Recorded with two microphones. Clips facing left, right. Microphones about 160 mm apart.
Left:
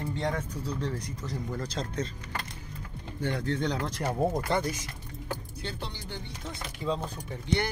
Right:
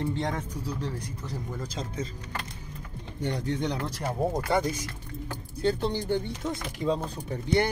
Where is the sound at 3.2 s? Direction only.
20° right (ahead or behind).